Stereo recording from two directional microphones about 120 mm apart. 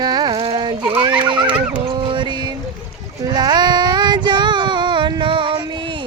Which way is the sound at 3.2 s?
35° right (ahead or behind).